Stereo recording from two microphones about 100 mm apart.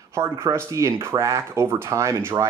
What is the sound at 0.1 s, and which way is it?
Speech, 30° right (ahead or behind).